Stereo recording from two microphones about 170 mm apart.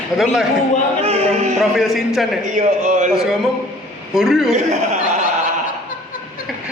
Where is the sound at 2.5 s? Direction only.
45° right (ahead or behind).